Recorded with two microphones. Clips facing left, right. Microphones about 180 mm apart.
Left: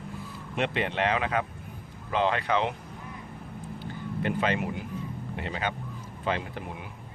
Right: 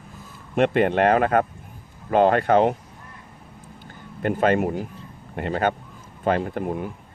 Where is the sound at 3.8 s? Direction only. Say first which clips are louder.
Right 4 dB; 50° right (ahead or behind).